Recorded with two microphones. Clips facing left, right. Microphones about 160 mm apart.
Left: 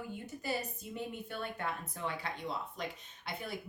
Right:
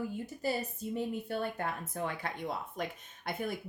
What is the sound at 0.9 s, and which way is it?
Speech, 40° right (ahead or behind).